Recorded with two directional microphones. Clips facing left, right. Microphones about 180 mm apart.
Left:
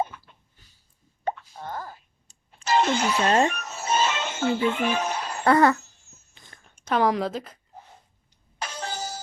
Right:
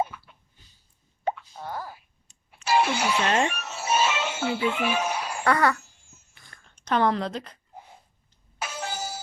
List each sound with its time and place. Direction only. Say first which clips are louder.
1.5 s speech: even; 10° right (ahead or behind)
2.6 s vehicle: left 1 dB; 10° right (ahead or behind)
3.2 s speech: left 5 dB; 35° left (ahead or behind)
3.5 s music: even; 10° right (ahead or behind)
5.5 s a sound: left 4 dB; 25° left (ahead or behind)
5.8 s wail: even; 10° right (ahead or behind)
6.3 s a sound: left 3 dB; 20° left (ahead or behind); by 7.6 s 5° left (ahead or behind)
8.5 s music: even; 5° right (ahead or behind)